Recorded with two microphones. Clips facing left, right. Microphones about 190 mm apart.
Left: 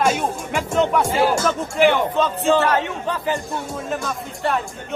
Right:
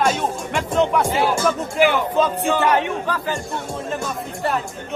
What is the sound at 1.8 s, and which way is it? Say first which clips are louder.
A man's voice: left 2 dB; 10° right (ahead or behind).